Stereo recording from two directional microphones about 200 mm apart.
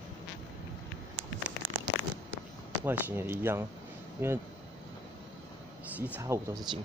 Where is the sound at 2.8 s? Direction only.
10° right (ahead or behind).